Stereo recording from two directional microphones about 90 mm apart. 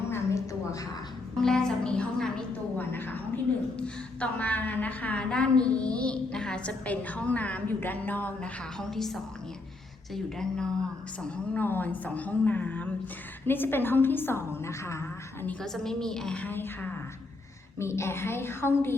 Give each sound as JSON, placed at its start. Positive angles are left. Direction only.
{"t": 0.1, "sound": "a sound", "side_deg": 35}
{"t": 1.4, "sound": "music", "side_deg": 5}
{"t": 2.7, "sound": "a sound", "side_deg": 20}
{"t": 3.8, "sound": "a woman's voice", "side_deg": 15}
{"t": 8.8, "sound": "a woman's voice", "side_deg": 5}
{"t": 10.3, "sound": "a woman's voice", "side_deg": 5}
{"t": 11.5, "sound": "a woman's voice", "side_deg": 20}
{"t": 15.6, "sound": "a woman's voice", "side_deg": 5}
{"t": 17.7, "sound": "a woman's voice", "side_deg": 30}